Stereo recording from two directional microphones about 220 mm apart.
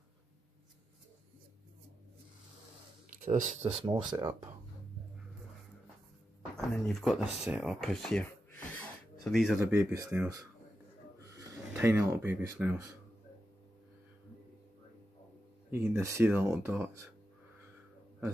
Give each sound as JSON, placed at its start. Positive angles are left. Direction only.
{"t": 3.1, "sound": "speech", "side_deg": -35}
{"t": 3.9, "sound": "speech", "side_deg": -20}
{"t": 6.5, "sound": "speech", "side_deg": 0}
{"t": 9.8, "sound": "speech", "side_deg": -15}
{"t": 15.7, "sound": "speech", "side_deg": -10}